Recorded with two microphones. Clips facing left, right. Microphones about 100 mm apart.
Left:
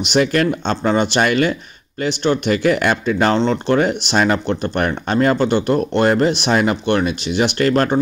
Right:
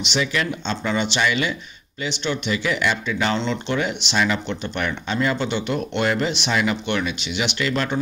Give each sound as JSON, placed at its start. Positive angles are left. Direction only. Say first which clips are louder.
{"t": 0.0, "sound": "speech", "louder": "left 8 dB", "side_deg": 50}